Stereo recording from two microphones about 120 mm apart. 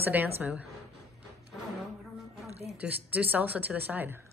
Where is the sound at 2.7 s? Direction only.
15° right (ahead or behind).